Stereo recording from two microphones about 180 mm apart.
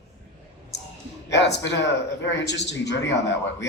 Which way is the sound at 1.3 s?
75° left (ahead or behind).